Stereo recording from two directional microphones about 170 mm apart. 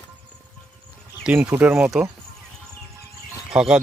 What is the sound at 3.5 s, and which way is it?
Speech, 5° right (ahead or behind).